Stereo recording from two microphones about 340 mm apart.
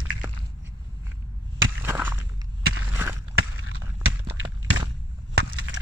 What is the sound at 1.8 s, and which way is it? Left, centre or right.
Walk, centre.